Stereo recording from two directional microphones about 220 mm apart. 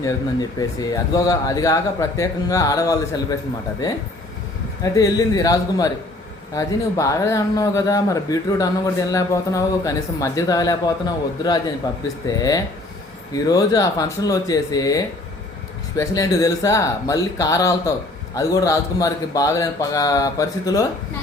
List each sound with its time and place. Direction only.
0.8 s a man's voice: 15° left (ahead or behind)
4.8 s a man's voice: 15° left (ahead or behind)